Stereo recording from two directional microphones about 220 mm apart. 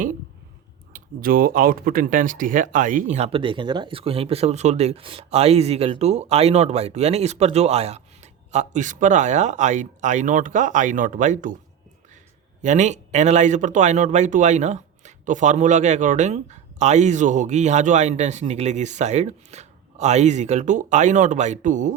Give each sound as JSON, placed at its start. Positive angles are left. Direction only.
{"t": 0.9, "sound": "speech", "side_deg": -40}
{"t": 12.6, "sound": "speech", "side_deg": -35}